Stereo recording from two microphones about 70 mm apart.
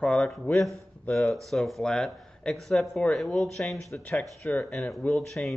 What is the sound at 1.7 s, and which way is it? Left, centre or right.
Speech, centre.